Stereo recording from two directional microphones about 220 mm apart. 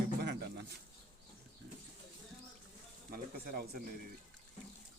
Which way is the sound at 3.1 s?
40° right (ahead or behind).